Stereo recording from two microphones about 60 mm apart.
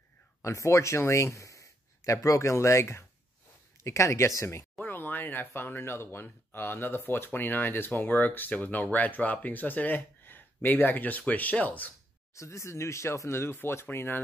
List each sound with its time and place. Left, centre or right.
0.4 s speech: left
4.8 s speech: left
12.4 s speech: left